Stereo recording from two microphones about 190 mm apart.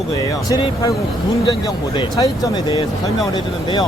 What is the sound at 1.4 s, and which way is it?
A man's voice, 25° left (ahead or behind).